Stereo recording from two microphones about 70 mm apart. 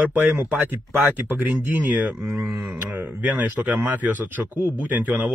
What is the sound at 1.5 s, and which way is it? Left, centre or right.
Speech, centre.